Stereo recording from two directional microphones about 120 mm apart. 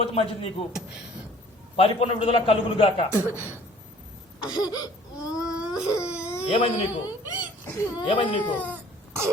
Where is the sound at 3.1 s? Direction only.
15° right (ahead or behind).